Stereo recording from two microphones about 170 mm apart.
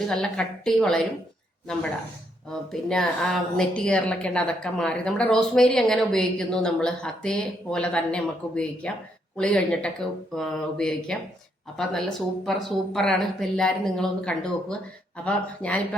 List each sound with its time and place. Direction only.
0.1 s a woman's voice: 5° left (ahead or behind)
2.5 s a woman's voice: 5° left (ahead or behind)